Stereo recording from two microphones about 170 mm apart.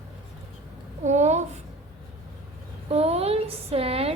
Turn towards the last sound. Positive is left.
turn(degrees=-35)  # may be behind; listen again after turning